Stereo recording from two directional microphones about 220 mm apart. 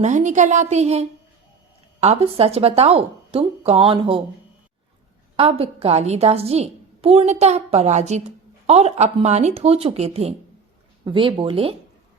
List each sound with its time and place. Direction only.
0.0 s a woman's voice: 35° right (ahead or behind)
5.4 s a woman's voice: 25° right (ahead or behind)